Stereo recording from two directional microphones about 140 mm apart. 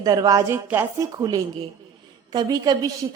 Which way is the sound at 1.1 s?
30° right (ahead or behind).